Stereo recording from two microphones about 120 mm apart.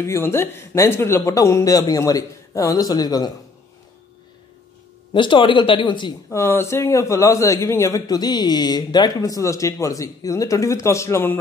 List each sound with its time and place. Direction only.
0.0 s a man's voice: 20° left (ahead or behind)
5.1 s speech: 40° left (ahead or behind)
6.3 s a man's voice: 20° left (ahead or behind)